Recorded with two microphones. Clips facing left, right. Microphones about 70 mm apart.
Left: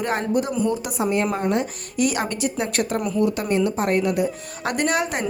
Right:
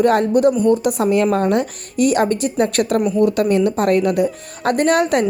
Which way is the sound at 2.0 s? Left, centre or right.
Right.